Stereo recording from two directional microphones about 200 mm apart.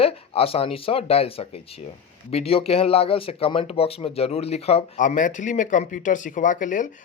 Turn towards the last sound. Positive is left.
turn(degrees=40)  # may be behind; listen again after turning